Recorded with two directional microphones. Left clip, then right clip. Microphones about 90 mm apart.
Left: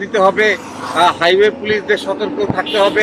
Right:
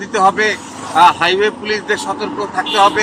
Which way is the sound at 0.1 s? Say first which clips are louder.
Left 1 dB; 45° right (ahead or behind).